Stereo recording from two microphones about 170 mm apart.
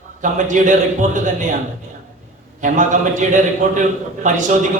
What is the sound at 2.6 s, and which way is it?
A man's voice, 45° right (ahead or behind).